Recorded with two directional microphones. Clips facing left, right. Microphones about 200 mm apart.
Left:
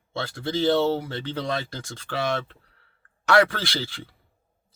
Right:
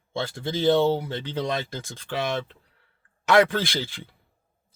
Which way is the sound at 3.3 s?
20° right (ahead or behind).